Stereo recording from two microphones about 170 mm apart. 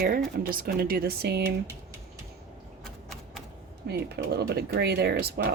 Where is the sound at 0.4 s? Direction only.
60° right (ahead or behind).